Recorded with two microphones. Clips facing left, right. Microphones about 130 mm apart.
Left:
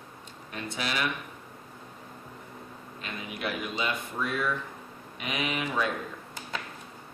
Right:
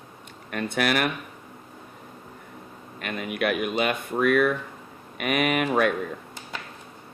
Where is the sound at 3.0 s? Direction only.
65° right (ahead or behind).